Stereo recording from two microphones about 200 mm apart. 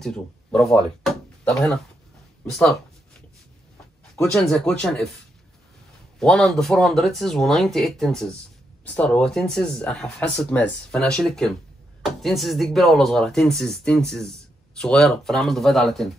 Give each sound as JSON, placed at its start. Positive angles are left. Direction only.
{"t": 0.0, "sound": "speech", "side_deg": 5}
{"t": 4.2, "sound": "speech", "side_deg": 0}
{"t": 6.1, "sound": "speech", "side_deg": 0}